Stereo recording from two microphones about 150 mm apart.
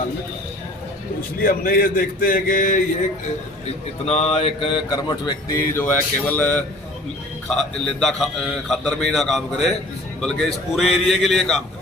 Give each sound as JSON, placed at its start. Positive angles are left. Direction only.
{"t": 1.4, "sound": "speech", "side_deg": 75}
{"t": 4.0, "sound": "mantra", "side_deg": 45}
{"t": 7.4, "sound": "a man's voice", "side_deg": 5}